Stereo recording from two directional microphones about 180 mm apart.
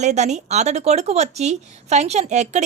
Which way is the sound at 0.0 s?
40° right (ahead or behind).